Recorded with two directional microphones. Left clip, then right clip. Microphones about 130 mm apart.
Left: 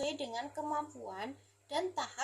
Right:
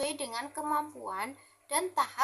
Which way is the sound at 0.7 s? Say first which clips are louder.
Right 6 dB; 15° right (ahead or behind).